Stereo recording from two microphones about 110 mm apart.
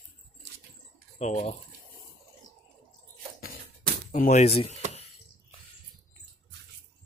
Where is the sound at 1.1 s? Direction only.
90° left.